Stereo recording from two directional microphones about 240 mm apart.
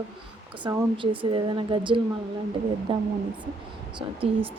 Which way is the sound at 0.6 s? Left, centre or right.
Centre.